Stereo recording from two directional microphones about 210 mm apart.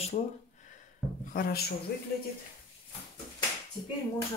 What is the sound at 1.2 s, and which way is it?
Speech, 45° left (ahead or behind).